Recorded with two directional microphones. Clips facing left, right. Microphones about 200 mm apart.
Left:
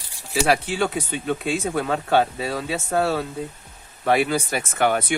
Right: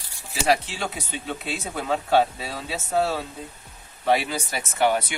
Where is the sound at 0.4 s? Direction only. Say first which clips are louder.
Left 1 dB; 55° left (ahead or behind).